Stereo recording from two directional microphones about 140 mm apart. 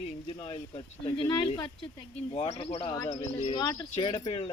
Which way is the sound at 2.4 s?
45° left (ahead or behind).